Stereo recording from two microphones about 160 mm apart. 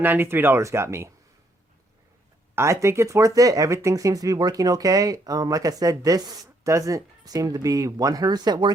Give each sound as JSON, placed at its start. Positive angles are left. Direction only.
{"t": 0.0, "sound": "speech", "side_deg": -10}
{"t": 2.6, "sound": "speech", "side_deg": -20}